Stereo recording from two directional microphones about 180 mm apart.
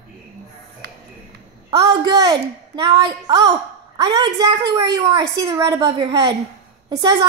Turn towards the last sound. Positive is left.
turn(degrees=-25)  # may be behind; listen again after turning